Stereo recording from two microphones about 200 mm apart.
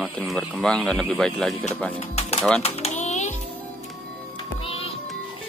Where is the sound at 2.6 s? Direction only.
30° left (ahead or behind).